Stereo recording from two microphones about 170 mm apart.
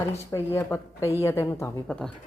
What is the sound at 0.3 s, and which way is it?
Speech, 15° left (ahead or behind).